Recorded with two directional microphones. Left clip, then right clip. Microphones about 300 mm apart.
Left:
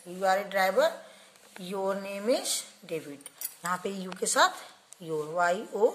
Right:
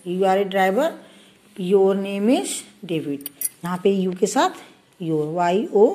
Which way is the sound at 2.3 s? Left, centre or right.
Centre.